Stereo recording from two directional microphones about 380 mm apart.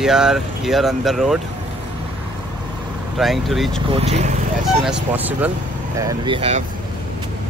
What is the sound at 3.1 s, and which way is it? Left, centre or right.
Speech, centre.